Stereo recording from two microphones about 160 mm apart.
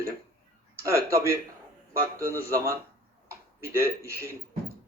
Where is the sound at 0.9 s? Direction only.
15° right (ahead or behind).